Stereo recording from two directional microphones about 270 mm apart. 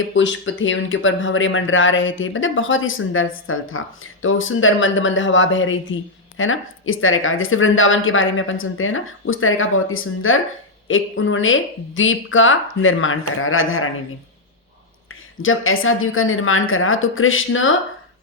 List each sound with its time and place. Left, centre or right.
0.1 s speech: left
15.1 s speech: left